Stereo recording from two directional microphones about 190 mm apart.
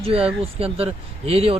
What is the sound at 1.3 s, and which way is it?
Speech, 30° right (ahead or behind).